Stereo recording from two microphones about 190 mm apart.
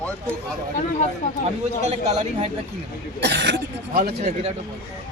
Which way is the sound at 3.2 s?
65° right (ahead or behind).